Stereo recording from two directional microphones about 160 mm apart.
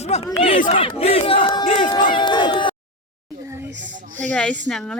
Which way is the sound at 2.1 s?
30° left (ahead or behind).